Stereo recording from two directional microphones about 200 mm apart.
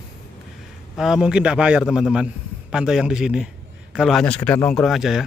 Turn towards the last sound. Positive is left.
turn(degrees=0)  # may be behind; listen again after turning